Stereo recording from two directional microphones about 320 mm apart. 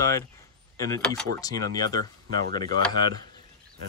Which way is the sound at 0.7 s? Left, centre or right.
Centre.